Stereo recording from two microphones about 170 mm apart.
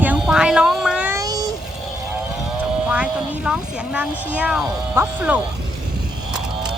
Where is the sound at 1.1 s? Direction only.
20° right (ahead or behind).